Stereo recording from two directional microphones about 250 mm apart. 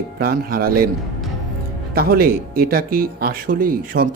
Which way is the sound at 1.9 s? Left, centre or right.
Right.